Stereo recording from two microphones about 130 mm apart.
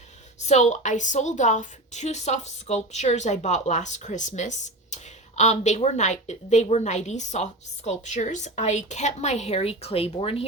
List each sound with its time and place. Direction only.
0.3 s a woman's voice: 60° left (ahead or behind)